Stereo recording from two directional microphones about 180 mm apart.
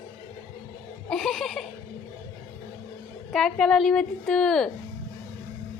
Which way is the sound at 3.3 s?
5° left (ahead or behind).